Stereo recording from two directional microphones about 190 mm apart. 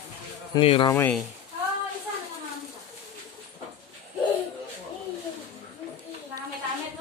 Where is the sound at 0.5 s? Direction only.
25° left (ahead or behind).